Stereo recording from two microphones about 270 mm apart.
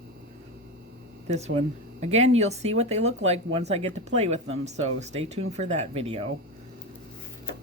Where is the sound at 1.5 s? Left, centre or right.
Right.